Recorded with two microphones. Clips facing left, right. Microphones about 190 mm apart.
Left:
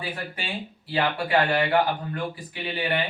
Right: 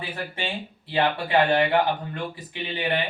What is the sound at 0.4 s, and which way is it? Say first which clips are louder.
Speech: right 2 dB; 25° right (ahead or behind).